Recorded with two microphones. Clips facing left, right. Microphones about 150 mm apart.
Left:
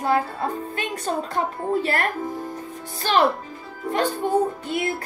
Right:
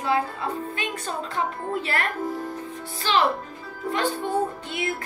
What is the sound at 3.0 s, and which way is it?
A woman's voice, 50° left (ahead or behind).